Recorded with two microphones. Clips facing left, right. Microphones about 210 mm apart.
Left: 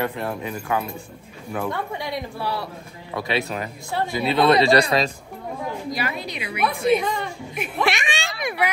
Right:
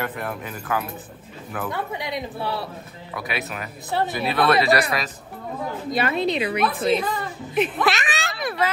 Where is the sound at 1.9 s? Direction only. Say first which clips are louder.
Even; 20° right (ahead or behind).